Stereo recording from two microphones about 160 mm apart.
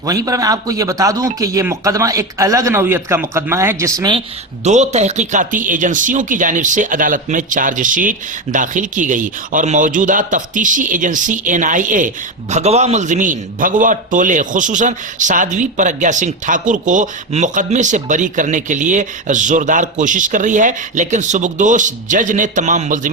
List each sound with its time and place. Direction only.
0.0 s speech: 20° right (ahead or behind)
4.6 s a man's voice: 45° right (ahead or behind)